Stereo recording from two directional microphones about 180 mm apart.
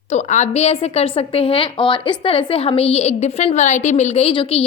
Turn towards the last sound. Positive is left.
turn(degrees=30)  # may be behind; listen again after turning